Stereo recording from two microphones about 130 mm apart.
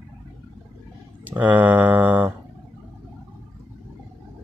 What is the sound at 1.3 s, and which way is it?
Speech, 15° right (ahead or behind).